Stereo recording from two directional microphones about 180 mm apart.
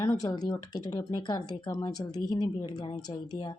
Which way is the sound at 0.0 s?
20° left (ahead or behind).